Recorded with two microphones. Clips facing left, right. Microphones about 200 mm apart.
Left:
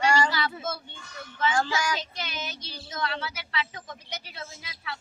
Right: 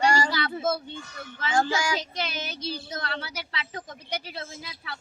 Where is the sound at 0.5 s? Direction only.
30° right (ahead or behind).